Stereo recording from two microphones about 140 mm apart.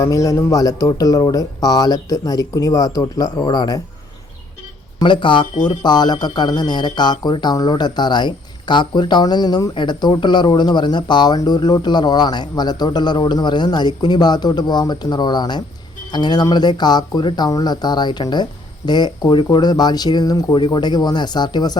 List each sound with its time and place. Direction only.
0.0 s speech: 25° left (ahead or behind)
4.9 s speech: 35° left (ahead or behind)